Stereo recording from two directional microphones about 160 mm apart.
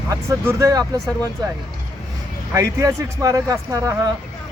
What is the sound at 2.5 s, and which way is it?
Speech, 20° right (ahead or behind).